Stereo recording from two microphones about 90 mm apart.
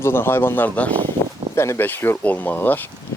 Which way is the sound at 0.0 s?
25° left (ahead or behind).